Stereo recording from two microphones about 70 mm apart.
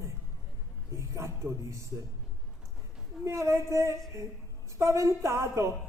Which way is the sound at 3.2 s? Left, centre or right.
Right.